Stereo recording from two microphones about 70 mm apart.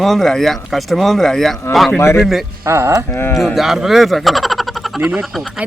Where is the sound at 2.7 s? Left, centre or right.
Right.